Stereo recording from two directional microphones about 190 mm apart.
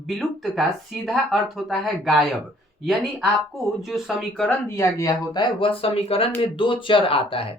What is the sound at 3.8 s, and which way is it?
Speech, centre (ahead or behind).